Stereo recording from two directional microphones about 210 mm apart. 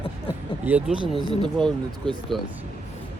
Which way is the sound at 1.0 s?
25° right (ahead or behind).